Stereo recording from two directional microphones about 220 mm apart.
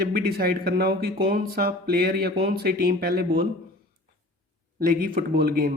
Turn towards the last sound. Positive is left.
turn(degrees=-45)  # may be behind; listen again after turning